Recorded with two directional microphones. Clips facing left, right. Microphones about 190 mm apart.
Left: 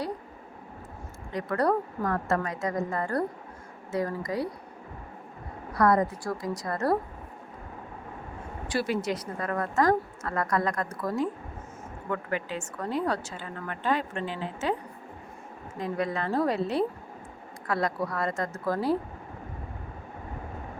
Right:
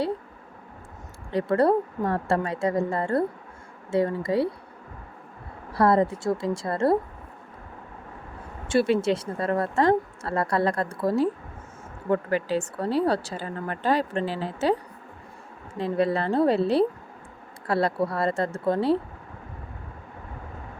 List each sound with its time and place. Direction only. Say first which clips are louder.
1.3 s a woman's voice: right 5 dB; 30° right (ahead or behind)
5.7 s a woman's voice: right 3 dB; 30° right (ahead or behind)
8.6 s a woman's voice: right 7 dB; 25° right (ahead or behind)
15.8 s speech: right 6 dB; 30° right (ahead or behind)